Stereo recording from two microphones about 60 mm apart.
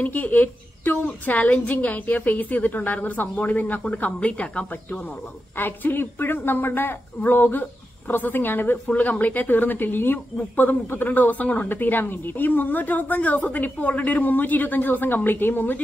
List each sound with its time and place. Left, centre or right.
0.0 s a woman's voice: left
5.6 s speech: left
8.8 s speech: left